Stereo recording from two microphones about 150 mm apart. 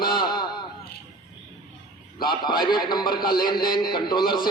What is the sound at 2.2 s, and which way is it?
A man's voice, 30° left (ahead or behind).